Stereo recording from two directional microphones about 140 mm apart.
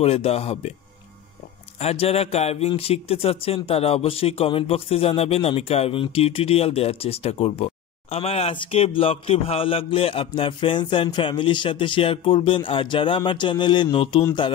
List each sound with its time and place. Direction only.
0.0 s a man's voice: 45° left (ahead or behind)
1.8 s a man's voice: 45° left (ahead or behind)